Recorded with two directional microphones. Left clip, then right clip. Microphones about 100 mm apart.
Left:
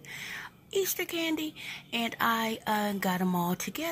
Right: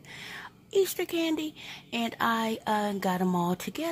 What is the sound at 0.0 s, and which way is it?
Speech, 30° right (ahead or behind).